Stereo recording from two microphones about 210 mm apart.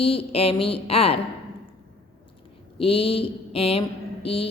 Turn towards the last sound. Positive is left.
turn(degrees=25)  # may be behind; listen again after turning